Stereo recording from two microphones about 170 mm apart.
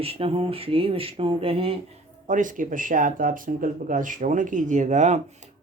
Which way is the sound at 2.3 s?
50° right (ahead or behind).